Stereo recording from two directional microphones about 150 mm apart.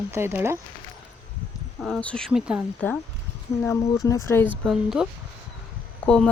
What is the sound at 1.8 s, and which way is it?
Speech, 5° left (ahead or behind).